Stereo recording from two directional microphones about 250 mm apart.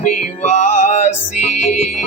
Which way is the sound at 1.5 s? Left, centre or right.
Left.